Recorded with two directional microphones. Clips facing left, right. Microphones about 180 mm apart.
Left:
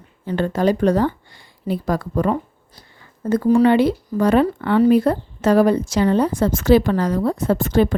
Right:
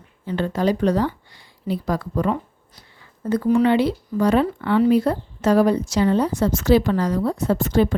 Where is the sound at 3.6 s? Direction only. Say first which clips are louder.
Left 3 dB; 50° left (ahead or behind).